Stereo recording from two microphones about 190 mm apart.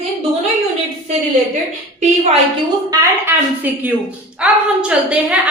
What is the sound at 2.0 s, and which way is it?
Speech, 30° right (ahead or behind).